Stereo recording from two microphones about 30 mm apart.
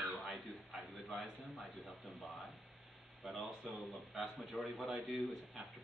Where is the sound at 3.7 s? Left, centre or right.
Centre.